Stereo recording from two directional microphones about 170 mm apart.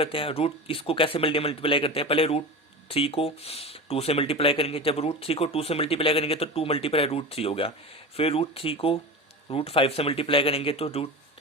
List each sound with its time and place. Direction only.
0.0 s speech: 30° left (ahead or behind)